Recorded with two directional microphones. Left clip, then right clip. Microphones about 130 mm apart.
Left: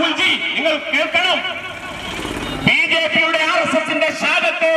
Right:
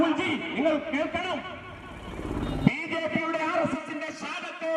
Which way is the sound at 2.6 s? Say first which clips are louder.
Left 15 dB; 25° left (ahead or behind).